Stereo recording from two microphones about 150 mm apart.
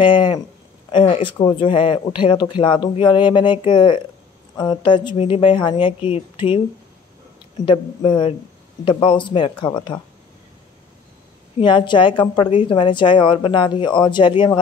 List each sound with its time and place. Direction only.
0.0 s speech: 35° left (ahead or behind)
7.6 s speech: 35° left (ahead or behind)
11.5 s speech: 30° left (ahead or behind)